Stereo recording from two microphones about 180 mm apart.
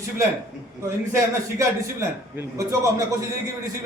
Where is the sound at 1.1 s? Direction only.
15° right (ahead or behind).